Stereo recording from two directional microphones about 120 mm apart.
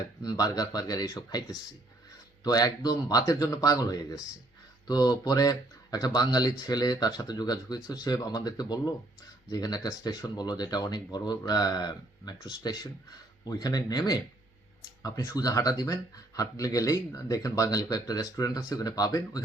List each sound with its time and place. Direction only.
0.3 s a man's voice: 30° left (ahead or behind)